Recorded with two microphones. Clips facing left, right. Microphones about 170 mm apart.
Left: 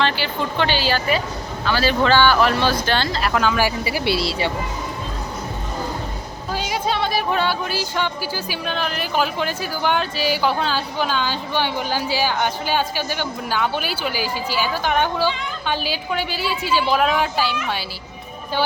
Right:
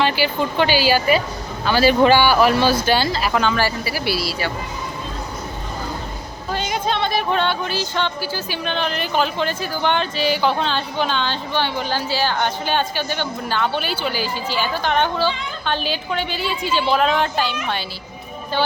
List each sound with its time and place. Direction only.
0.0 s speech: 10° right (ahead or behind)
3.8 s speech: 20° left (ahead or behind)
6.5 s speech: 5° left (ahead or behind)